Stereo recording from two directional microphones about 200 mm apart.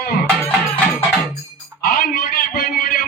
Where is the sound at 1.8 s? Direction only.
45° left (ahead or behind).